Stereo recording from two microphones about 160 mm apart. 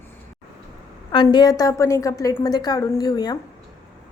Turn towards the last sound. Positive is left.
turn(degrees=25)  # may be behind; listen again after turning